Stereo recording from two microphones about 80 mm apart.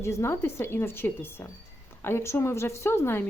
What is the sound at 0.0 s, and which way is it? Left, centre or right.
A woman's voice, left.